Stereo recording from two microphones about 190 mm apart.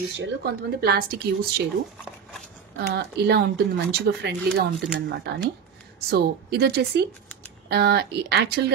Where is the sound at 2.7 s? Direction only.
60° right (ahead or behind).